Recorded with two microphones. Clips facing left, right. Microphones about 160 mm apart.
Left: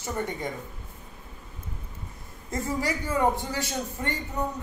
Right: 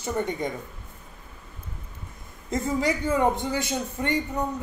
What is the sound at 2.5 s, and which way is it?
A man's voice, 20° right (ahead or behind).